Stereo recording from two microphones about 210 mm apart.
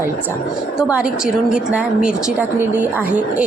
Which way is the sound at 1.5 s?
5° right (ahead or behind).